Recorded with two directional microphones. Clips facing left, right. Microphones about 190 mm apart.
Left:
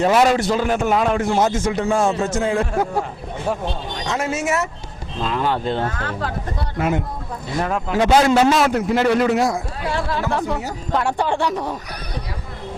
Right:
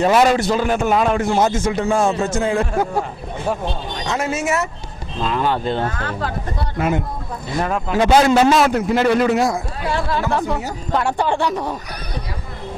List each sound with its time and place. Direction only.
0.0 s a man's voice: 20° right (ahead or behind)
1.9 s a man's voice: 25° right (ahead or behind)
11.5 s speech: 35° right (ahead or behind)